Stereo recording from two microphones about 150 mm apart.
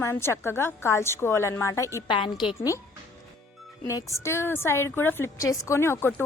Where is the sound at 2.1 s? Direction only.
35° left (ahead or behind).